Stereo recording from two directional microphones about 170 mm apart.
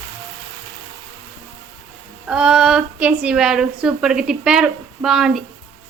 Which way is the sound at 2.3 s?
5° right (ahead or behind).